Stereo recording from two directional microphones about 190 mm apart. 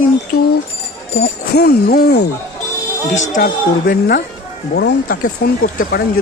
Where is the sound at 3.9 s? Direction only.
50° left (ahead or behind).